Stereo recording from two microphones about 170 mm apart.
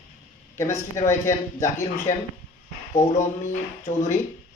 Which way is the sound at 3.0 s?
45° left (ahead or behind).